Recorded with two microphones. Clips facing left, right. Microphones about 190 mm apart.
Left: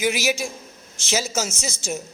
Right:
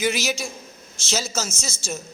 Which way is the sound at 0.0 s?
10° left (ahead or behind).